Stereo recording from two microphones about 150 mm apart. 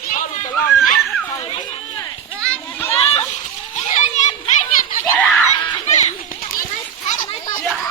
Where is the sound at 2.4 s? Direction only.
10° left (ahead or behind).